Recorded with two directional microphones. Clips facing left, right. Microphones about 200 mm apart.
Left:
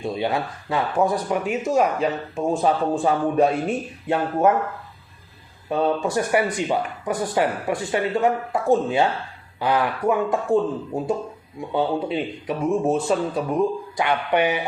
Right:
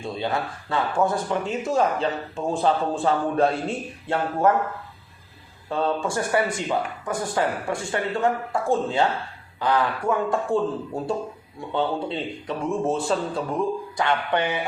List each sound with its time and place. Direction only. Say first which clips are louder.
0.0 s speech: left 3 dB; 20° left (ahead or behind)
5.6 s speech: left 3 dB; 20° left (ahead or behind)